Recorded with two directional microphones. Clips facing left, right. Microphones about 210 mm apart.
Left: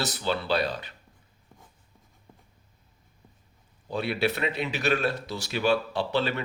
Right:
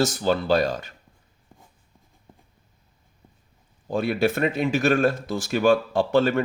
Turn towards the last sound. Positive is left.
turn(degrees=-50)  # may be behind; listen again after turning